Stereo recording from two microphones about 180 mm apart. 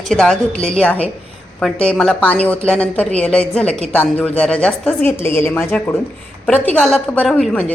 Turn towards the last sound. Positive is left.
turn(degrees=5)  # may be behind; listen again after turning